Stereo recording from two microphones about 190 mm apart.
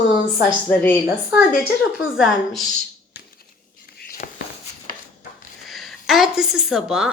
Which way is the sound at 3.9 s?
50° left (ahead or behind).